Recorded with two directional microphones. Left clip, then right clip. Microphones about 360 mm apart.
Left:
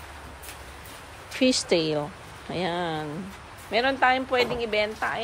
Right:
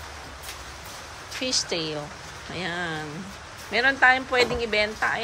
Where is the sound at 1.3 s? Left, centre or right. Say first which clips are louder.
Left 4 dB; centre.